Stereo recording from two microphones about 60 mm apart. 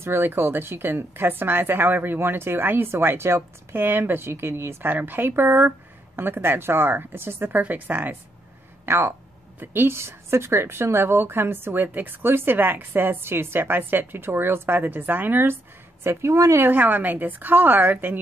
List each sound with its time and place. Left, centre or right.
0.0 s a woman's voice: right
4.9 s a woman's voice: right
8.8 s a woman's voice: right
16.0 s speech: right
16.5 s a woman's voice: right